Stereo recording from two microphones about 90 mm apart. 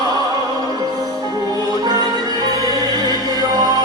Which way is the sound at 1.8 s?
45° right (ahead or behind).